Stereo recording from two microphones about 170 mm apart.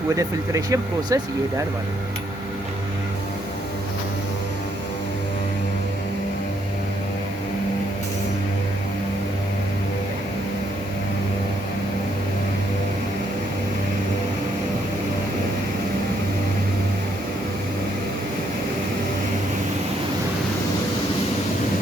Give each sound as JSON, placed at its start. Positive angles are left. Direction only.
{"t": 0.2, "sound": "speech", "side_deg": -20}